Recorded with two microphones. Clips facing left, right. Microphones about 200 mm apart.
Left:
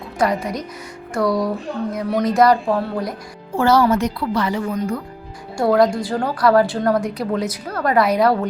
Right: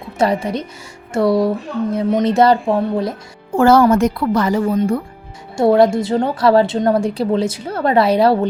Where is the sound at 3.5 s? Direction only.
50° right (ahead or behind).